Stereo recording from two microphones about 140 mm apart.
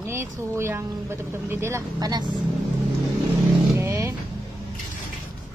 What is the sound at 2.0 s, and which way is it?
Speech, 30° right (ahead or behind).